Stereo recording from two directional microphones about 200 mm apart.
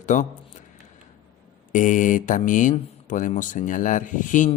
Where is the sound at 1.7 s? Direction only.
40° left (ahead or behind).